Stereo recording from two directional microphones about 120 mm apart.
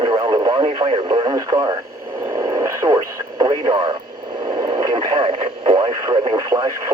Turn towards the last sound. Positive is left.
turn(degrees=-35)  # may be behind; listen again after turning